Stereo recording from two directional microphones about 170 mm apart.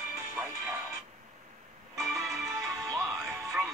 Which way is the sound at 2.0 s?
Centre (ahead or behind).